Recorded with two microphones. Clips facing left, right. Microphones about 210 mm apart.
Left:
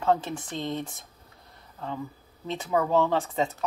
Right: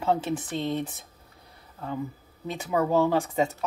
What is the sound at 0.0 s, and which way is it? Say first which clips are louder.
Speech: even; 15° right (ahead or behind).